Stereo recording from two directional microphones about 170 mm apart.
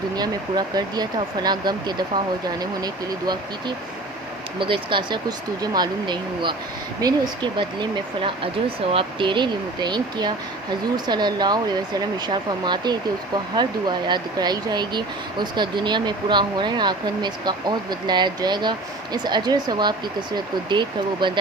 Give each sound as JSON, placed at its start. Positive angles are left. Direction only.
{"t": 0.2, "sound": "speech", "side_deg": -25}
{"t": 4.6, "sound": "speech", "side_deg": -30}